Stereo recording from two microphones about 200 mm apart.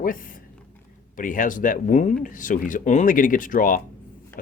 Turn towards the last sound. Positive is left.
turn(degrees=45)  # may be behind; listen again after turning